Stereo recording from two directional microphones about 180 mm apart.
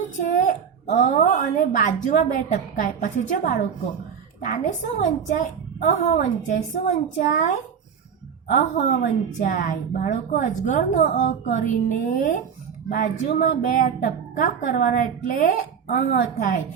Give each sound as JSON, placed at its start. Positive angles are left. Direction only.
{"t": 0.2, "sound": "a woman's voice", "side_deg": 40}
{"t": 8.4, "sound": "a woman's voice", "side_deg": 45}